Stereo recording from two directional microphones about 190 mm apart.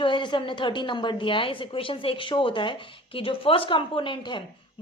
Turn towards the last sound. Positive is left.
turn(degrees=25)  # may be behind; listen again after turning